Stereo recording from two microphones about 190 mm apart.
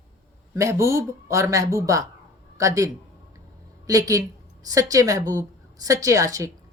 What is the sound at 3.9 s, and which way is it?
A woman's voice, 15° right (ahead or behind).